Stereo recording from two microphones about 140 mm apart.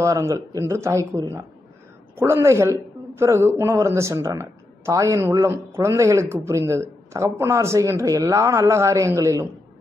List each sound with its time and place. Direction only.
0.0 s a man's voice: 20° right (ahead or behind)